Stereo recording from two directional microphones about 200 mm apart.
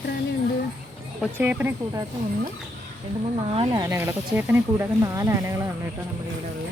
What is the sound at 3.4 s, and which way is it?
Speech, 25° right (ahead or behind).